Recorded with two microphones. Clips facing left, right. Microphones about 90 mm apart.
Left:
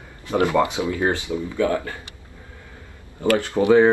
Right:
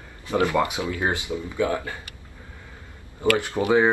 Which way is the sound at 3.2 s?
20° right (ahead or behind).